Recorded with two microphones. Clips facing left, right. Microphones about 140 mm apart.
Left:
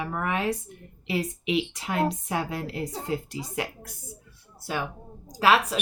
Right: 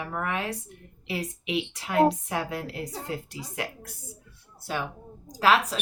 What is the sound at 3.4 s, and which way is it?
Speech, 25° left (ahead or behind).